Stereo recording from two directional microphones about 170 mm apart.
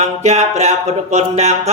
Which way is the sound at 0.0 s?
40° right (ahead or behind).